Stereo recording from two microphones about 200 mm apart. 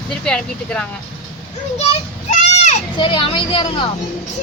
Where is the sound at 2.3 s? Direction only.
35° left (ahead or behind).